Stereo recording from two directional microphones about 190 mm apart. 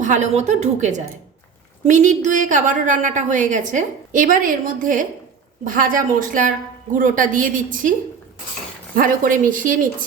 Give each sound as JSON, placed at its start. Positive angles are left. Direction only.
{"t": 0.0, "sound": "a woman's voice", "side_deg": -40}
{"t": 9.0, "sound": "a woman's voice", "side_deg": -45}